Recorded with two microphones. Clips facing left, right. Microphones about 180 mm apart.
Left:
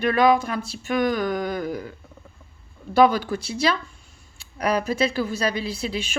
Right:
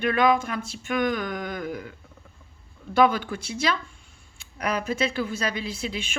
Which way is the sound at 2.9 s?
35° left (ahead or behind).